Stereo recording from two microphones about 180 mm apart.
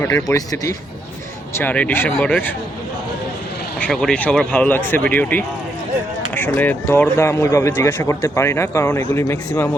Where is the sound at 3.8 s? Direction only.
5° left (ahead or behind).